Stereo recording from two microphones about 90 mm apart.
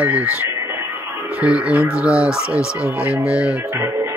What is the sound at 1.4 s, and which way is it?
Speech, 15° right (ahead or behind).